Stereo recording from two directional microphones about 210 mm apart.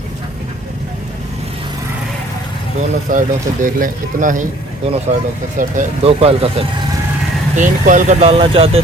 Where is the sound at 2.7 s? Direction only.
40° right (ahead or behind).